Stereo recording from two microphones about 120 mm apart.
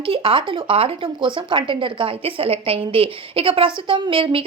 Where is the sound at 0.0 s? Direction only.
50° right (ahead or behind).